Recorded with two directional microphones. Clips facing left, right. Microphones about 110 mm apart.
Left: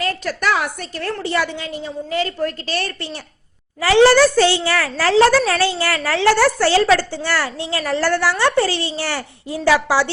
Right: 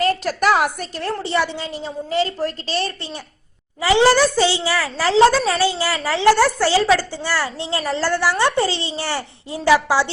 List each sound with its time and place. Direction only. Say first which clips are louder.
0.0 s a woman's voice: right 3 dB; 40° right (ahead or behind)
1.3 s a child's voice: even; 25° right (ahead or behind)